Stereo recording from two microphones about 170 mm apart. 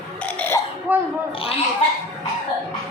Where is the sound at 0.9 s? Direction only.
10° right (ahead or behind).